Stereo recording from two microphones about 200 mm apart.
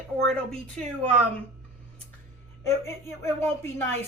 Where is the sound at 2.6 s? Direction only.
15° left (ahead or behind).